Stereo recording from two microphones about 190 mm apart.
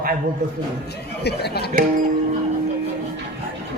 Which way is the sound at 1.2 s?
60° left (ahead or behind).